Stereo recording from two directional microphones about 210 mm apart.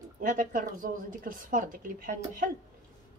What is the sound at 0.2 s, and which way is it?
Speech, 40° right (ahead or behind).